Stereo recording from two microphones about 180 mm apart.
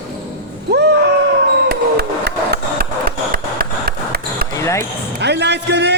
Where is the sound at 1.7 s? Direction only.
65° right (ahead or behind).